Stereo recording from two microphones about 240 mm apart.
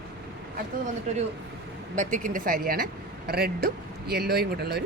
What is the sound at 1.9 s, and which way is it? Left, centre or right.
Speech, right.